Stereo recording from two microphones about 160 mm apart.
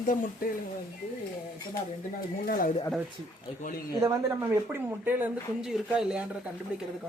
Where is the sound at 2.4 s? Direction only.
60° left (ahead or behind).